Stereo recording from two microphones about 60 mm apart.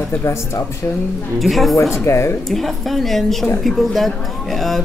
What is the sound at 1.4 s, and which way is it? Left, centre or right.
Speech, centre.